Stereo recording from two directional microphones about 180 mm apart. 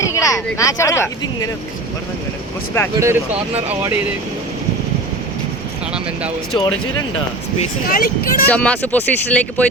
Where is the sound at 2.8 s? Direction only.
15° left (ahead or behind).